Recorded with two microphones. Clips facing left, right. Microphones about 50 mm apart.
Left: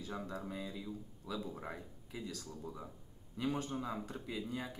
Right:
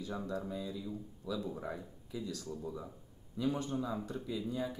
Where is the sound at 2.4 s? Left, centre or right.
Centre.